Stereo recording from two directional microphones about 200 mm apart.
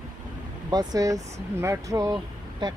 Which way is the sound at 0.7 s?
20° right (ahead or behind).